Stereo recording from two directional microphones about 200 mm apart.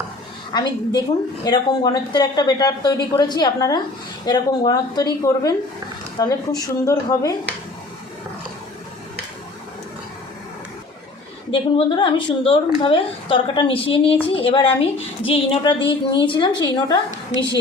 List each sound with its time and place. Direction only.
0.5 s a woman's voice: 20° left (ahead or behind)
11.5 s a woman's voice: 25° left (ahead or behind)